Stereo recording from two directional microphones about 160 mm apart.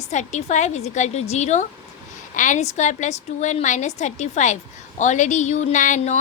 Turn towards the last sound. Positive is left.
turn(degrees=50)  # may be behind; listen again after turning